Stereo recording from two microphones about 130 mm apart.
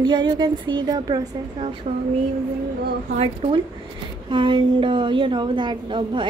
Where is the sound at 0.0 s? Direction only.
35° right (ahead or behind).